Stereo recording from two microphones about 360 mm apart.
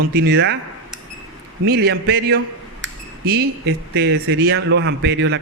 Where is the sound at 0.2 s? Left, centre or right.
Right.